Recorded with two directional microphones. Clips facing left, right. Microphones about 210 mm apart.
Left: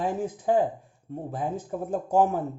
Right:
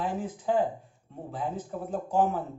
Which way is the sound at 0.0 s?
45° left (ahead or behind).